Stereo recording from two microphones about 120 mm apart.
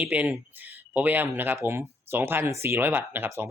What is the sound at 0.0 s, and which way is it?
Speech, 10° right (ahead or behind).